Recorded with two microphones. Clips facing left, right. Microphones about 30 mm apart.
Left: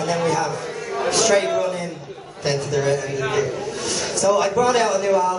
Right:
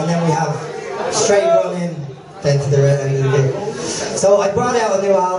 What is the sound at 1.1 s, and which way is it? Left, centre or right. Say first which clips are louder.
Speech: right 3 dB; left.